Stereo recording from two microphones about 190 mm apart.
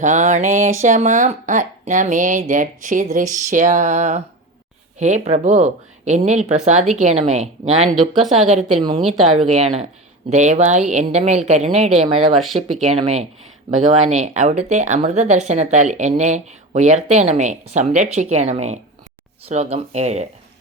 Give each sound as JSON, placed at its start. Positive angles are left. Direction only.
{"t": 0.0, "sound": "speech", "side_deg": -40}
{"t": 7.9, "sound": "speech", "side_deg": 0}
{"t": 8.4, "sound": "speech", "side_deg": -35}